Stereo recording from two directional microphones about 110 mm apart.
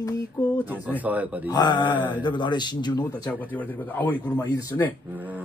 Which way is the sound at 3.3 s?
15° left (ahead or behind).